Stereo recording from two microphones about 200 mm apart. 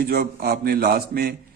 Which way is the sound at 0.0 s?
50° right (ahead or behind).